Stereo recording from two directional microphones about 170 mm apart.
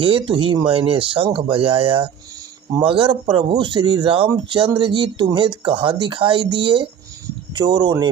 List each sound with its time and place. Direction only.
0.0 s speech: 30° right (ahead or behind)